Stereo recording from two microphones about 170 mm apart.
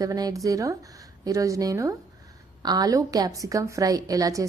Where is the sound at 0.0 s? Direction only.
20° right (ahead or behind).